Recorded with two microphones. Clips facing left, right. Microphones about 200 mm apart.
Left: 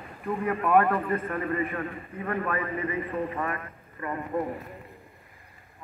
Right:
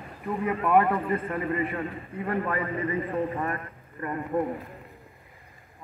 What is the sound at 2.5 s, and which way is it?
A man's voice, 30° right (ahead or behind).